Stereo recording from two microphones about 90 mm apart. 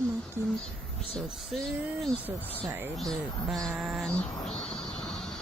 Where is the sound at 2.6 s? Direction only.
20° right (ahead or behind).